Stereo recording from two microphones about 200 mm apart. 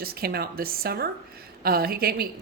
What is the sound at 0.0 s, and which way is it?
A woman's voice, 50° right (ahead or behind).